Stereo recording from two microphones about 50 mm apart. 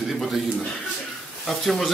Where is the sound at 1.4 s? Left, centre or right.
Centre.